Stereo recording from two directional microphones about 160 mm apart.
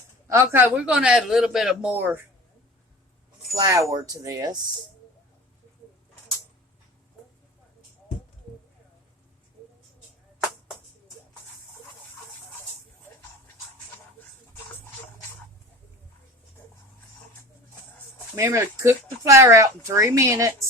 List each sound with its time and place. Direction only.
0.3 s speech: 15° right (ahead or behind)
3.5 s speech: 20° right (ahead or behind)
18.3 s speech: 15° right (ahead or behind)